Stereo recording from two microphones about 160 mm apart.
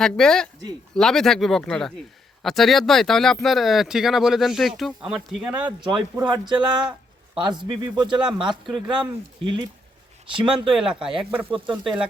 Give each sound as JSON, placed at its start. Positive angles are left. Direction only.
{"t": 0.0, "sound": "speech", "side_deg": 5}
{"t": 5.9, "sound": "speech", "side_deg": -25}
{"t": 10.8, "sound": "speech", "side_deg": -5}